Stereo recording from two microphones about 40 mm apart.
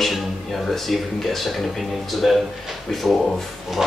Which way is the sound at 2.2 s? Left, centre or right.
Centre.